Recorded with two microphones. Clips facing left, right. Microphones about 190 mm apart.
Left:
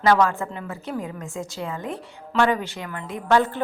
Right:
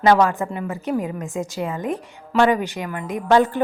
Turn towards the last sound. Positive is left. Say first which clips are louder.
# right 4 dB
turn(degrees=-15)  # may be behind; listen again after turning